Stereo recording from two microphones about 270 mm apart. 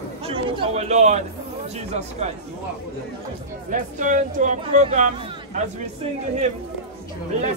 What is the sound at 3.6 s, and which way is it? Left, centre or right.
A woman's voice, right.